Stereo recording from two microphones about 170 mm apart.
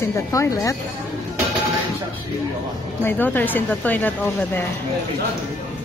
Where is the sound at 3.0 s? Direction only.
10° left (ahead or behind).